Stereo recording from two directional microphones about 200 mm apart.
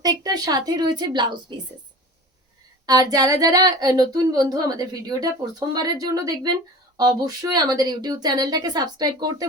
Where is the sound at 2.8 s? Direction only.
20° right (ahead or behind).